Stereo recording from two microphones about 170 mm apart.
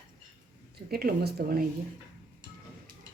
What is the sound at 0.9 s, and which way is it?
Speech, 65° right (ahead or behind).